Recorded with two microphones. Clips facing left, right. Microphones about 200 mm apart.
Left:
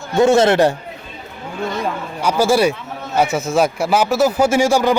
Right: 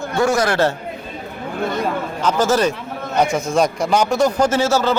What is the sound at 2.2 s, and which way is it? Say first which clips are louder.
A man's voice: left 2 dB; 10° left (ahead or behind).